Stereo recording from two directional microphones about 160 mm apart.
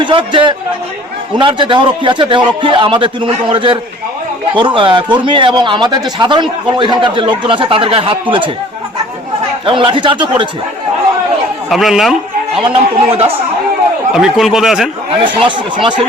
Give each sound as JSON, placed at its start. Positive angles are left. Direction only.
{"t": 0.0, "sound": "a man's voice", "side_deg": -30}
{"t": 9.6, "sound": "a man's voice", "side_deg": -30}
{"t": 11.7, "sound": "speech", "side_deg": 0}
{"t": 12.5, "sound": "a man's voice", "side_deg": -35}
{"t": 14.1, "sound": "speech", "side_deg": -5}
{"t": 15.2, "sound": "a man's voice", "side_deg": -30}